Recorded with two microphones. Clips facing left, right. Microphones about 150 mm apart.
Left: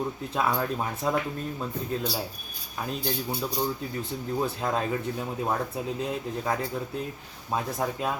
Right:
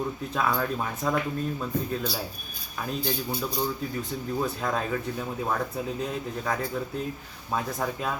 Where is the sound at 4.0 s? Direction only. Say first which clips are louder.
Left 1 dB; 25° left (ahead or behind).